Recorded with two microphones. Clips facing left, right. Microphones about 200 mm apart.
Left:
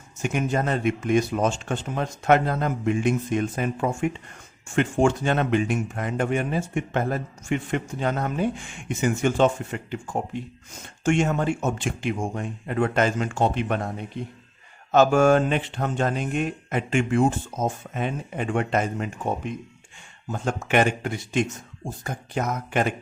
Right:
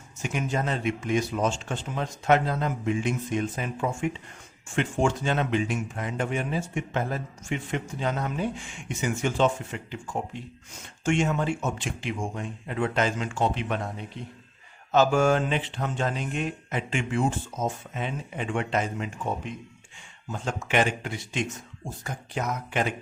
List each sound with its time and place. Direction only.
0.2 s a man's voice: 55° left (ahead or behind)
14.9 s speech: 55° left (ahead or behind)